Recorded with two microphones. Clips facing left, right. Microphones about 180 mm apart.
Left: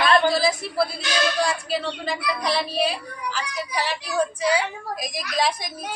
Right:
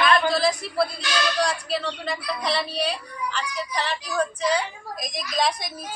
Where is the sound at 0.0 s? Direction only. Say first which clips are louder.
Left 2 dB; 30° left (ahead or behind).